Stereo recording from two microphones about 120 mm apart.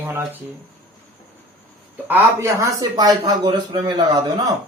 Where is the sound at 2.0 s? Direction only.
20° right (ahead or behind).